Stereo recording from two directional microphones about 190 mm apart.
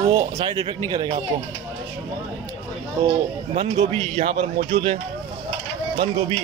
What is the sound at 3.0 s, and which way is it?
A man's voice, 35° right (ahead or behind).